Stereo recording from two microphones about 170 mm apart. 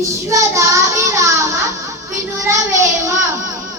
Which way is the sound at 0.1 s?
20° right (ahead or behind).